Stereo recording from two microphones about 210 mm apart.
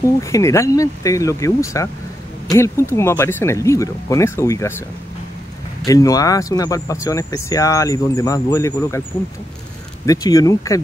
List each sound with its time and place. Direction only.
0.0 s speech: 15° left (ahead or behind)
5.9 s speech: 15° left (ahead or behind)
10.0 s speech: 15° left (ahead or behind)